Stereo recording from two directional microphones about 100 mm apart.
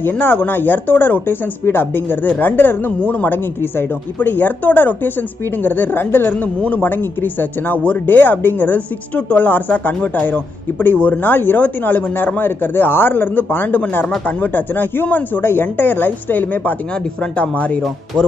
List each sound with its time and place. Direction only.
0.0 s speech: 20° left (ahead or behind)